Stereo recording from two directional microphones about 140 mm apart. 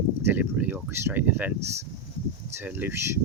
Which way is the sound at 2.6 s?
15° right (ahead or behind).